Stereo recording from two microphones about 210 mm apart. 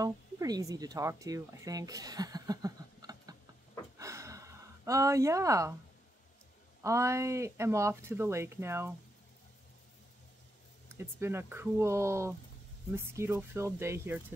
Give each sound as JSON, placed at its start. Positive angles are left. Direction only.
{"t": 0.0, "sound": "speech", "side_deg": -15}
{"t": 4.0, "sound": "gasp", "side_deg": -15}
{"t": 6.8, "sound": "speech", "side_deg": -15}
{"t": 10.9, "sound": "speech", "side_deg": -10}